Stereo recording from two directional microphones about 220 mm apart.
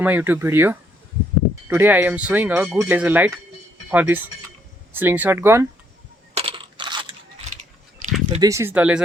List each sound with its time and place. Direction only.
0.0 s speech: 10° right (ahead or behind)
6.3 s crunch: 25° right (ahead or behind)
7.9 s a sound: 35° right (ahead or behind)
8.4 s speech: 15° right (ahead or behind)